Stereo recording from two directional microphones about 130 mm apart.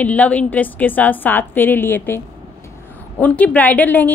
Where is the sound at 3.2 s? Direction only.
10° left (ahead or behind).